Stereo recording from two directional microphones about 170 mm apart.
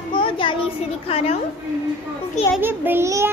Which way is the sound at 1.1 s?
35° left (ahead or behind).